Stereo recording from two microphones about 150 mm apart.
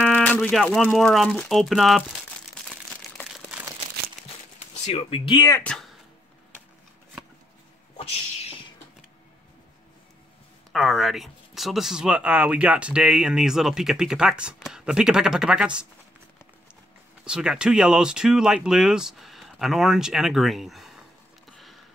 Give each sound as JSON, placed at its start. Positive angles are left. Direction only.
{"t": 0.0, "sound": "speech", "side_deg": 10}
{"t": 2.7, "sound": "crumpling", "side_deg": 0}
{"t": 4.8, "sound": "speech", "side_deg": 45}
{"t": 5.5, "sound": "speech", "side_deg": 5}
{"t": 8.0, "sound": "a sound", "side_deg": 40}
{"t": 10.7, "sound": "speech", "side_deg": 0}
{"t": 17.2, "sound": "speech", "side_deg": -5}
{"t": 21.5, "sound": "a sound", "side_deg": 0}